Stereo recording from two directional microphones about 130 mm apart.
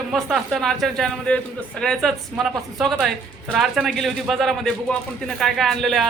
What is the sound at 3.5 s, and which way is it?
A man's voice, centre (ahead or behind).